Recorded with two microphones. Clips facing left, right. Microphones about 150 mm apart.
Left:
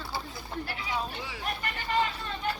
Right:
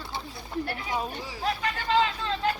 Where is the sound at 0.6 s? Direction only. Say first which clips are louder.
Right 3 dB; 45° right (ahead or behind).